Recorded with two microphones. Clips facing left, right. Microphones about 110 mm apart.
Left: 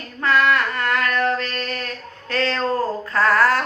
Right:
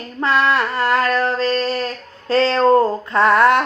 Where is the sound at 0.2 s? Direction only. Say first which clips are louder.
Right 1 dB; 30° right (ahead or behind).